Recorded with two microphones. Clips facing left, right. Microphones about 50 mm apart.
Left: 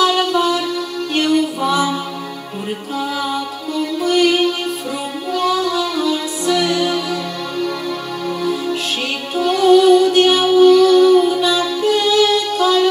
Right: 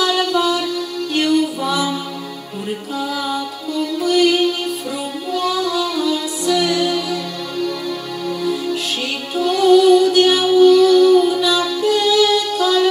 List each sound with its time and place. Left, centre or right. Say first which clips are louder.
0.0 s music: left 2 dB; left
4.0 s music: even; left
9.3 s music: left 1 dB; left